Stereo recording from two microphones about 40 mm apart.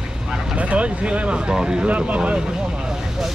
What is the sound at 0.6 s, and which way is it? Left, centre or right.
Speech, right.